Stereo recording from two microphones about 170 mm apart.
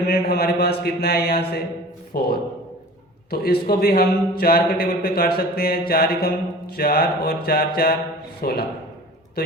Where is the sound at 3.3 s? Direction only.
65° left (ahead or behind).